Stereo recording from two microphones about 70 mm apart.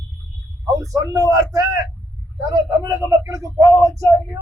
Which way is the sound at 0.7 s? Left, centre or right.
Right.